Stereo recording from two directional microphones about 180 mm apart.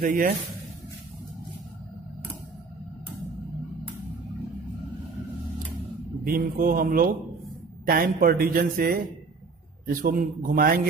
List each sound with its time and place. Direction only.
0.0 s a man's voice: 45° right (ahead or behind)
6.2 s a man's voice: 55° right (ahead or behind)